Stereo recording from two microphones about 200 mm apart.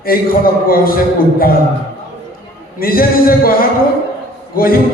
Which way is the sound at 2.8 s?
45° left (ahead or behind).